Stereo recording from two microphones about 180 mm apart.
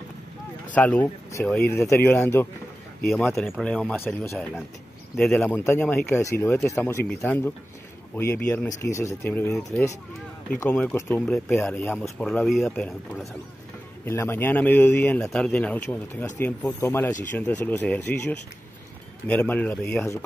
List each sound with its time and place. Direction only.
0.7 s speech: 10° left (ahead or behind)
3.1 s speech: centre (ahead or behind); by 9.9 s 15° left (ahead or behind)
10.7 s speech: 5° left (ahead or behind)